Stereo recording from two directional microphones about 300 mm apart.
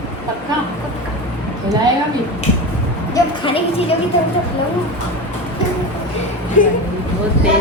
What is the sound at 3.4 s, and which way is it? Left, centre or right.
Speech, centre.